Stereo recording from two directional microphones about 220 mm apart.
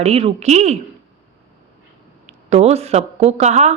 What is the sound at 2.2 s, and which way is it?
Speech, 30° right (ahead or behind).